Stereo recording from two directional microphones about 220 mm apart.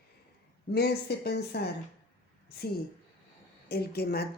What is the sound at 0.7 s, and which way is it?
Speech, 45° left (ahead or behind).